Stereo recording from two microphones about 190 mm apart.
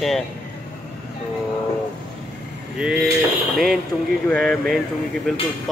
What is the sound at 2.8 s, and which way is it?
Speech, 5° right (ahead or behind).